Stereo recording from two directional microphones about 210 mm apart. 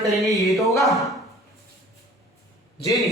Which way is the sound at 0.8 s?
Centre (ahead or behind).